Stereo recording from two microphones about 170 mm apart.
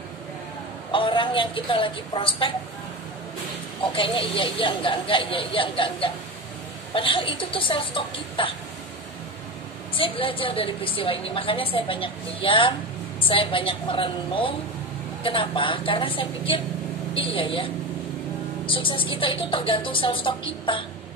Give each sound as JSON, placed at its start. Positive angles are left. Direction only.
{"t": 0.9, "sound": "a woman's voice", "side_deg": 30}
{"t": 3.9, "sound": "a woman's voice", "side_deg": 30}
{"t": 9.9, "sound": "a woman's voice", "side_deg": 30}
{"t": 18.7, "sound": "a woman's voice", "side_deg": 30}